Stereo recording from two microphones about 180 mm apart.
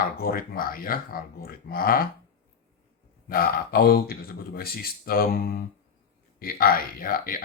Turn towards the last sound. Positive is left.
turn(degrees=50)  # may be behind; listen again after turning